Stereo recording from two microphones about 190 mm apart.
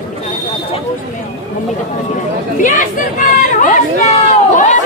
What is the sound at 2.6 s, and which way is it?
Chatter, 45° left (ahead or behind).